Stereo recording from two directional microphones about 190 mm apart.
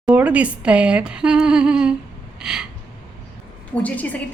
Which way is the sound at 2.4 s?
5° right (ahead or behind).